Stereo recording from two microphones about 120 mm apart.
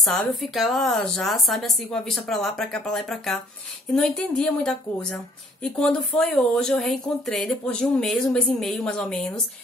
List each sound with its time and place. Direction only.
0.0 s speech: centre (ahead or behind)